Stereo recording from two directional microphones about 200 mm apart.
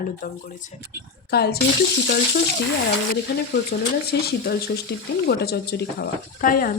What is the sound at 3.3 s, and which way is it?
Speech, 55° left (ahead or behind).